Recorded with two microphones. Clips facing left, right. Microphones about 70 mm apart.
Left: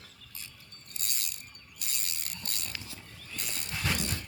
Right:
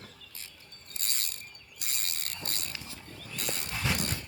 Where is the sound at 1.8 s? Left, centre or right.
Right.